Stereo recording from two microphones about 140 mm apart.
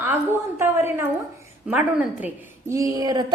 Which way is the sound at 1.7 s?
10° right (ahead or behind).